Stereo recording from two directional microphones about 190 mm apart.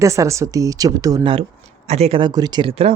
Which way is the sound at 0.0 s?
15° right (ahead or behind).